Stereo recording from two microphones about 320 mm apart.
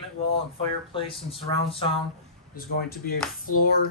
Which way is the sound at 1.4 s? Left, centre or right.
Centre.